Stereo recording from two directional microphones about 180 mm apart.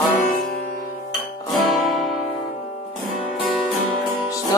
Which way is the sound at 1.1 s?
Centre (ahead or behind).